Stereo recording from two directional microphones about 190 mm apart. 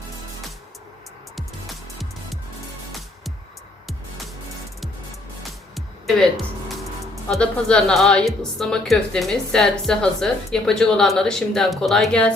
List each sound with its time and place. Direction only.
5.5 s music: centre (ahead or behind)
7.3 s a woman's voice: 5° left (ahead or behind)